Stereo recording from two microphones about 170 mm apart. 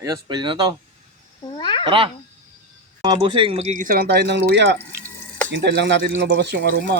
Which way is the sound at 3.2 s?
30° right (ahead or behind).